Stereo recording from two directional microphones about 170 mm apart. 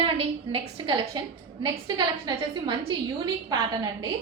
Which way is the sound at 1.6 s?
25° right (ahead or behind).